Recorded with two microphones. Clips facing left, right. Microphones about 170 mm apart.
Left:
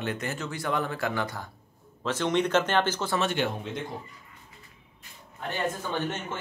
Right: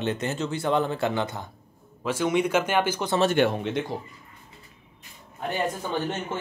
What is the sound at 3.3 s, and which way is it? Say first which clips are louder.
Speech: right 7 dB; 70° right (ahead or behind).